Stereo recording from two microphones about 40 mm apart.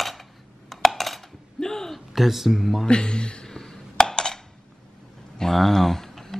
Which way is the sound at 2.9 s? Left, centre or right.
Left.